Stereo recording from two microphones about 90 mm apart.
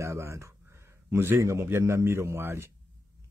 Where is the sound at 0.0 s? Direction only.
30° right (ahead or behind).